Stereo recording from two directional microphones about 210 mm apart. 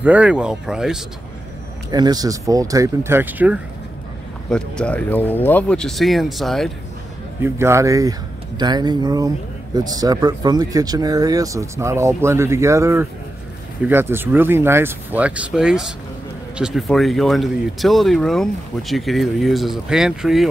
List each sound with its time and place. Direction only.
0.0 s speech: 5° right (ahead or behind)
1.9 s speech: 20° right (ahead or behind)
4.5 s speech: 5° left (ahead or behind)
7.4 s speech: 10° right (ahead or behind)